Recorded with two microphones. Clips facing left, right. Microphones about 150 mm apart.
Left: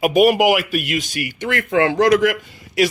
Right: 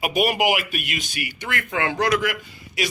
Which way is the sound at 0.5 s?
45° left (ahead or behind).